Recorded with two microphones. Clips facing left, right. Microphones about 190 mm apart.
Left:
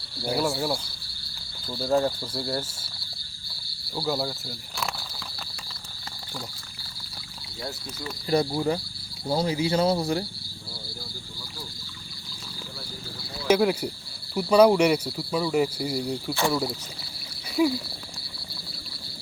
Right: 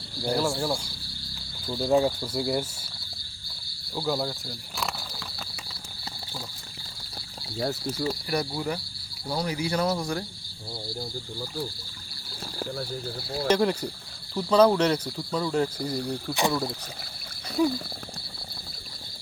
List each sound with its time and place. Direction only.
0.2 s speech: 5° left (ahead or behind)
1.8 s cricket: 5° right (ahead or behind)
3.9 s speech: 5° left (ahead or behind)
7.6 s speech: 50° right (ahead or behind)
8.3 s speech: 25° left (ahead or behind)
13.5 s speech: 5° left (ahead or behind)